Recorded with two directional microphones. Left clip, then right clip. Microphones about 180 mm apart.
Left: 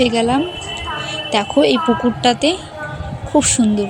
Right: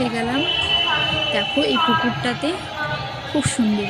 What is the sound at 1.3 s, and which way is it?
Speech, 25° left (ahead or behind).